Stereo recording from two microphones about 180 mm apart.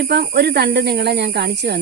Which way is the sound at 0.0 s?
65° right (ahead or behind).